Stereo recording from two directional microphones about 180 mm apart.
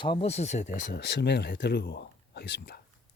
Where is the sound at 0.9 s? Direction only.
70° left (ahead or behind).